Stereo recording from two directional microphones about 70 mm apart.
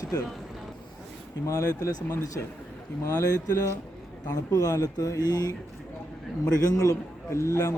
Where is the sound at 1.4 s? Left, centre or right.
Left.